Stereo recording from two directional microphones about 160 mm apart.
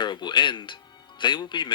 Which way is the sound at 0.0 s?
30° left (ahead or behind).